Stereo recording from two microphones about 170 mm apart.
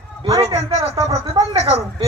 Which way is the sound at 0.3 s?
35° right (ahead or behind).